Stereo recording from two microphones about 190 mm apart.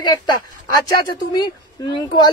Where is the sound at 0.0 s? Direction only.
20° left (ahead or behind).